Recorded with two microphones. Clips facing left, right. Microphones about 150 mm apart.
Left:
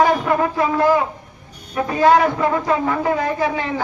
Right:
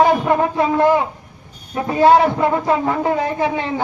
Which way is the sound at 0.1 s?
25° right (ahead or behind).